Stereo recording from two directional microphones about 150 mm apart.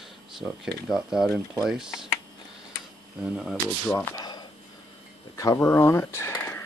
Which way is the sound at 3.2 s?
5° right (ahead or behind).